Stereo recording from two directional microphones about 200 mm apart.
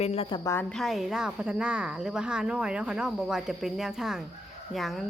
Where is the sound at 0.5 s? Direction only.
Centre (ahead or behind).